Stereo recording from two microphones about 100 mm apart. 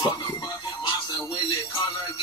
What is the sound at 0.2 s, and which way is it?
Music, 45° left (ahead or behind).